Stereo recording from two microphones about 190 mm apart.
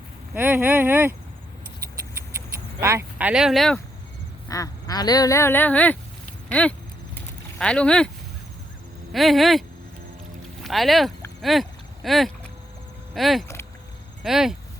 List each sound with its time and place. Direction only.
0.3 s speech: 10° right (ahead or behind)
2.8 s speech: 10° right (ahead or behind)
4.4 s duck: 20° left (ahead or behind)
6.5 s a sound: 5° left (ahead or behind)
7.6 s speech: 5° left (ahead or behind)
9.1 s speech: centre (ahead or behind)